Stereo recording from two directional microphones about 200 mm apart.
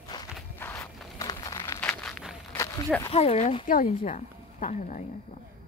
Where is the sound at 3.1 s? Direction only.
30° left (ahead or behind).